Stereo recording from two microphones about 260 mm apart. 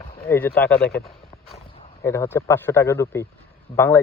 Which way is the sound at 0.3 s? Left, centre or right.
Centre.